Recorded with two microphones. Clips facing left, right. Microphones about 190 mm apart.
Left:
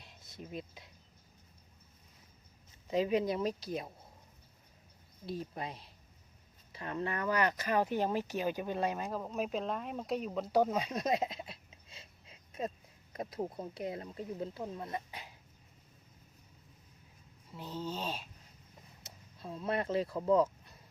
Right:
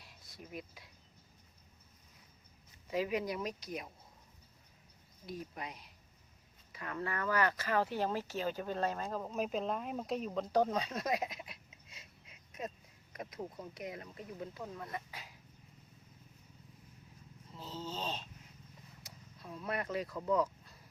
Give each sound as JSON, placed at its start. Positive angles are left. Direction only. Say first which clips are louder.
{"t": 0.0, "sound": "a sound", "louder": "left 4 dB", "side_deg": 25}
{"t": 2.8, "sound": "speech", "louder": "left 4 dB", "side_deg": 25}
{"t": 5.2, "sound": "speech", "louder": "left 4 dB", "side_deg": 30}
{"t": 9.0, "sound": "speech", "louder": "left 1 dB", "side_deg": 0}
{"t": 17.5, "sound": "speech", "louder": "left 3 dB", "side_deg": 10}
{"t": 19.0, "sound": "vehicle", "louder": "left 5 dB", "side_deg": 25}